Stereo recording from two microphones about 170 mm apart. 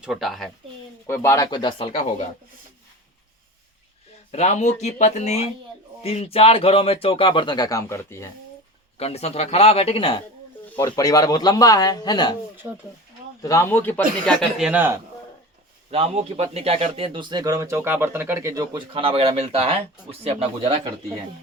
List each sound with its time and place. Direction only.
0.0 s speech: centre (ahead or behind)
1.0 s speech: 15° left (ahead or behind); by 2.2 s 40° left (ahead or behind)
4.3 s speech: 40° left (ahead or behind); by 8.3 s 15° left (ahead or behind)
9.0 s speech: 35° left (ahead or behind)
10.8 s speech: 20° left (ahead or behind)
13.4 s speech: 15° left (ahead or behind)
14.6 s a man's voice: 10° right (ahead or behind)
15.9 s a man's voice: 35° right (ahead or behind)